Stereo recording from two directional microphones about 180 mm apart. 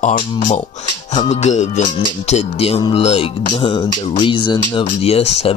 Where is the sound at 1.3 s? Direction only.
40° left (ahead or behind).